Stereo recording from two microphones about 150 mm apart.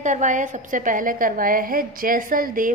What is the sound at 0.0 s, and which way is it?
A woman's voice, 55° right (ahead or behind).